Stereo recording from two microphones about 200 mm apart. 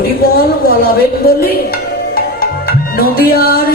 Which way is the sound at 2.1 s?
50° left (ahead or behind).